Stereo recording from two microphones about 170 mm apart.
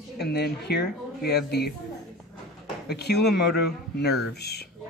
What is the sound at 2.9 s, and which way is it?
Speech, 75° left (ahead or behind).